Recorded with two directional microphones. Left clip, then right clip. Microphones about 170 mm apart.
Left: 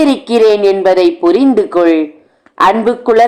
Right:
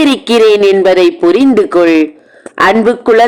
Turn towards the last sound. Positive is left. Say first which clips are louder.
# right 2 dB
turn(degrees=-30)  # may be behind; listen again after turning